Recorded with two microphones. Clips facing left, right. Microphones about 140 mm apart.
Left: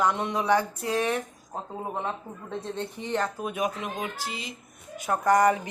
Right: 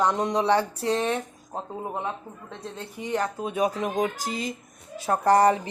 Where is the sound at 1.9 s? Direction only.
5° right (ahead or behind).